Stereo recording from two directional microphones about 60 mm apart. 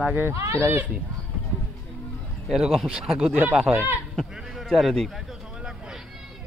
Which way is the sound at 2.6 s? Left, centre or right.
Centre.